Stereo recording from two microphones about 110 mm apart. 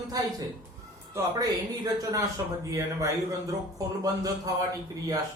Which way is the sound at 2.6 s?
30° right (ahead or behind).